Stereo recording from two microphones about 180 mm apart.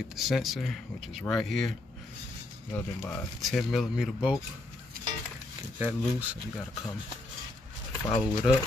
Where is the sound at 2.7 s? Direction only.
5° left (ahead or behind).